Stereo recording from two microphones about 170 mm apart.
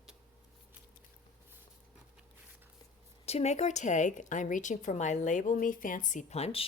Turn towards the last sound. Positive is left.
turn(degrees=35)  # may be behind; listen again after turning